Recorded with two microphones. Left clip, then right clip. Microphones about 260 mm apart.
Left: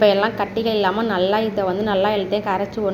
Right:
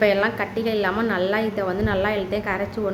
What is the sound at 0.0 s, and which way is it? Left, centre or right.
A woman's voice, centre.